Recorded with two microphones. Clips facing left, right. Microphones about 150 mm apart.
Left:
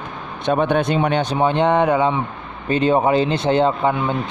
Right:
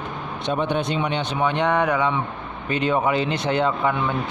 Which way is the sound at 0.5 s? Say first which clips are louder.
Left 6 dB; 50° left (ahead or behind).